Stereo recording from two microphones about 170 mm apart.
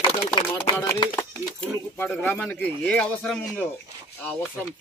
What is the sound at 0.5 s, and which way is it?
Speech, 20° left (ahead or behind).